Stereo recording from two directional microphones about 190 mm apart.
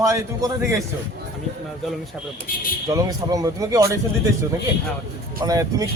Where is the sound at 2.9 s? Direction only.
20° right (ahead or behind).